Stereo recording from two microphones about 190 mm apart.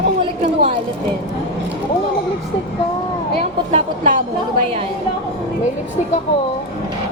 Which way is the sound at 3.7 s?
40° right (ahead or behind).